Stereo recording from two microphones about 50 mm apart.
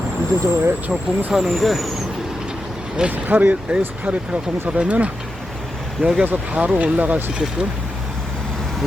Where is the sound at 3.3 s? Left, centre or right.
Right.